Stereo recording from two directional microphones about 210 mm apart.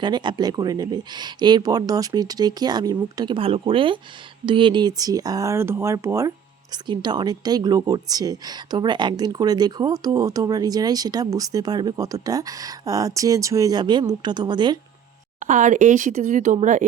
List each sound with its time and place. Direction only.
0.0 s speech: 20° right (ahead or behind)
15.4 s speech: 35° right (ahead or behind)